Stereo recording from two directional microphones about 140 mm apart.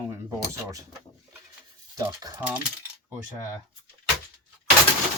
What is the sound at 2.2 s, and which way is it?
Speech, 25° right (ahead or behind).